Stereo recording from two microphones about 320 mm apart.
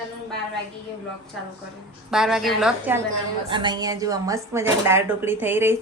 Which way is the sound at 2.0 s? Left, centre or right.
Centre.